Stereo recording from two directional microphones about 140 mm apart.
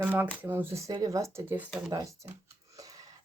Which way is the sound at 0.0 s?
10° right (ahead or behind).